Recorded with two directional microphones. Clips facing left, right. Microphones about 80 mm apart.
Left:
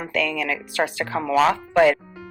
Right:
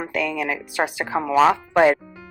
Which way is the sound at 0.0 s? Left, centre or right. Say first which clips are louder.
Even; centre.